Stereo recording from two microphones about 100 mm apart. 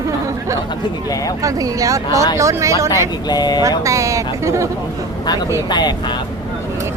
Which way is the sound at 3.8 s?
30° right (ahead or behind).